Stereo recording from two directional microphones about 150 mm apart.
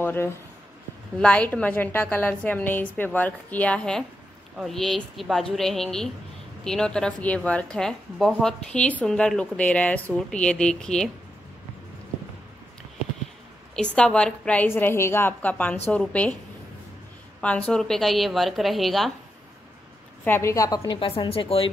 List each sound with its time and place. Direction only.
0.0 s a woman's voice: 15° left (ahead or behind)
13.9 s a woman's voice: 5° left (ahead or behind)
17.4 s a woman's voice: 10° left (ahead or behind)
20.2 s a woman's voice: 15° left (ahead or behind); by 21.6 s 40° left (ahead or behind)